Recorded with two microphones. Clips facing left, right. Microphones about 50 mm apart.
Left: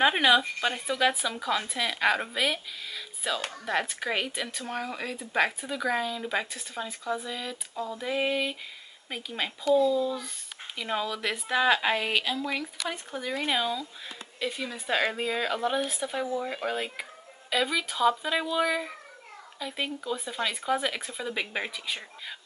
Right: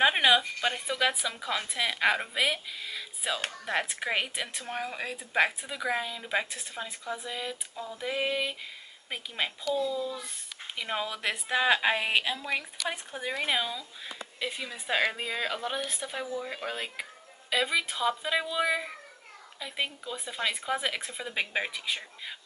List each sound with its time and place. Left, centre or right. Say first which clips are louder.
0.0 s speech: left 1 dB; centre
9.8 s speech: left 6 dB; centre
10.8 s speech: left 2 dB; centre
13.6 s speech: left 3 dB; centre